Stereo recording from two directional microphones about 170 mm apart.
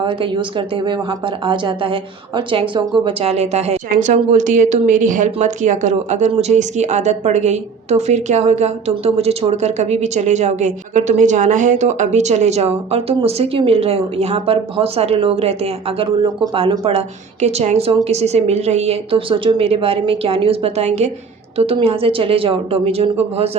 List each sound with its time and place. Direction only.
0.0 s a woman's voice: 30° right (ahead or behind)